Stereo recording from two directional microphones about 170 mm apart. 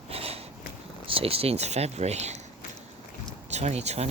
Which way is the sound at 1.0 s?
35° right (ahead or behind).